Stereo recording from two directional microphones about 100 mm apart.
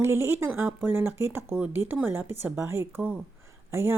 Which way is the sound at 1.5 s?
15° right (ahead or behind).